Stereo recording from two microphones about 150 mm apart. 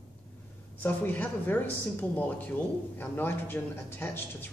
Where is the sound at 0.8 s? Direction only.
10° left (ahead or behind).